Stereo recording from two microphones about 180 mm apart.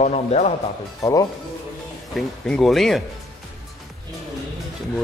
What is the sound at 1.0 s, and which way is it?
Speech, 15° left (ahead or behind).